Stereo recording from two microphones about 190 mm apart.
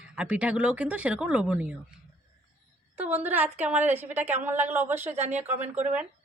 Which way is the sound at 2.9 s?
10° right (ahead or behind).